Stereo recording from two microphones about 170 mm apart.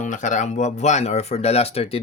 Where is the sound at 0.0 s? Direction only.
45° left (ahead or behind).